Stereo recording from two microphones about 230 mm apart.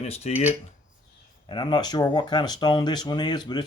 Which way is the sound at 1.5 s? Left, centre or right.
Centre.